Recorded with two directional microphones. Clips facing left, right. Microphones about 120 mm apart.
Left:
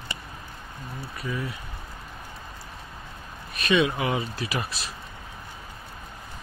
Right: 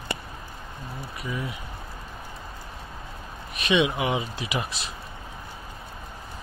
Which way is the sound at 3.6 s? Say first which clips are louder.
Even; 20° right (ahead or behind).